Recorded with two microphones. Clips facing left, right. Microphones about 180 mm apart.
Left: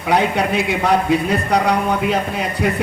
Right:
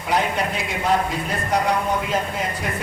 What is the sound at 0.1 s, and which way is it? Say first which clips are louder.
Speech: left 5 dB; 65° left (ahead or behind).